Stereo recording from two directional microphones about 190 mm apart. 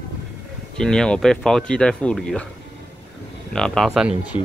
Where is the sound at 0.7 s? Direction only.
5° left (ahead or behind).